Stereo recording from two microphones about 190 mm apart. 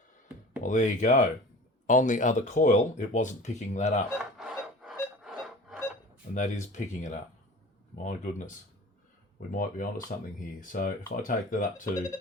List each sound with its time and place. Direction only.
0.6 s speech: 40° left (ahead or behind)
4.1 s music: 5° right (ahead or behind)
6.3 s speech: 40° left (ahead or behind)